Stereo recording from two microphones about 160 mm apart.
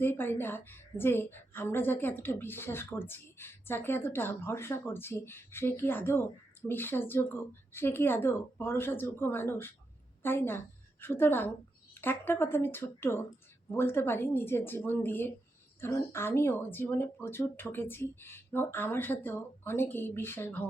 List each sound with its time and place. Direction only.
0.0 s a woman's voice: 15° left (ahead or behind)